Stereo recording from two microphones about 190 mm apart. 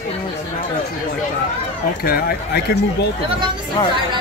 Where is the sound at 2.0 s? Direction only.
55° left (ahead or behind).